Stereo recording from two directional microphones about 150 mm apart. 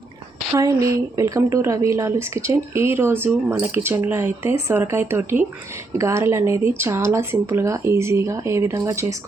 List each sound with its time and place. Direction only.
0.6 s speech: 20° right (ahead or behind)